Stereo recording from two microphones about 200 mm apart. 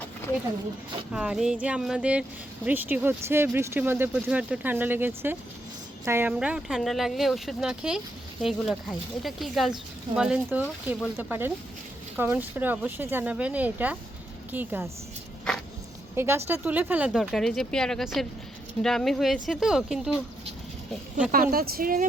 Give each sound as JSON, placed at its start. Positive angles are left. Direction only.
{"t": 1.1, "sound": "speech", "side_deg": -5}
{"t": 16.1, "sound": "speech", "side_deg": -10}
{"t": 21.5, "sound": "speech", "side_deg": -50}